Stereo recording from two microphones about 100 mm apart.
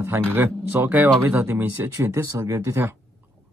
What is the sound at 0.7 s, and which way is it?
Speech, 20° right (ahead or behind).